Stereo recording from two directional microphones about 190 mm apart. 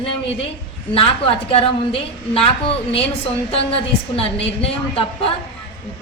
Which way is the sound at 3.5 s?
30° left (ahead or behind).